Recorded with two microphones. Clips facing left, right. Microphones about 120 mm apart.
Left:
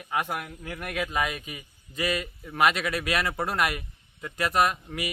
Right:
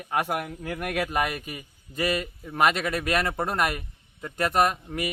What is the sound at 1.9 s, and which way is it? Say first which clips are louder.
Speech: right 2 dB; centre (ahead or behind).